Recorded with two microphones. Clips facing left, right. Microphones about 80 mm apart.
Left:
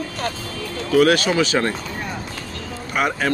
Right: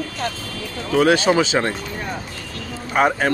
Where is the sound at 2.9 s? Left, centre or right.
Right.